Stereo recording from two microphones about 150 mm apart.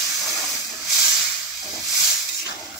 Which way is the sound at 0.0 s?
Centre (ahead or behind).